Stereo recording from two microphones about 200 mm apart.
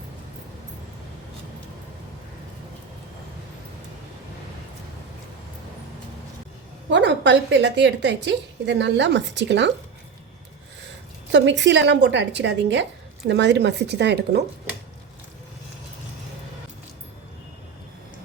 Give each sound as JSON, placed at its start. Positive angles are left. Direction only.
{"t": 6.9, "sound": "a woman's voice", "side_deg": -65}
{"t": 11.3, "sound": "a woman's voice", "side_deg": -60}